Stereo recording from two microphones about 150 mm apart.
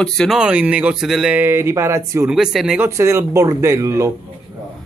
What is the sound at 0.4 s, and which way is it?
Speech, 10° right (ahead or behind).